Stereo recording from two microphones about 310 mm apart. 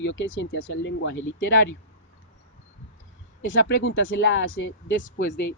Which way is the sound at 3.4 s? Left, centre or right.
Left.